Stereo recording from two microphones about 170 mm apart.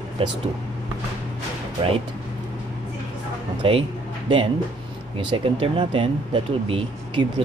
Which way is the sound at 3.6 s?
35° right (ahead or behind).